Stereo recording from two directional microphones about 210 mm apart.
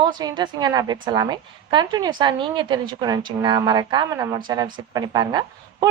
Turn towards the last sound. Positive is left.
turn(degrees=-20)  # may be behind; listen again after turning